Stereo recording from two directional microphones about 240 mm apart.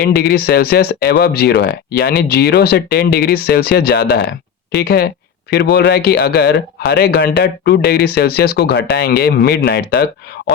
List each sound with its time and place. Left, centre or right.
0.1 s speech: left